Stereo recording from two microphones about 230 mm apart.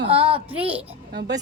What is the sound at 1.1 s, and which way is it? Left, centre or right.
Speech, right.